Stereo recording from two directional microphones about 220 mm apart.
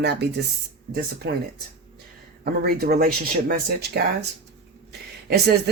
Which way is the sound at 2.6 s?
45° right (ahead or behind).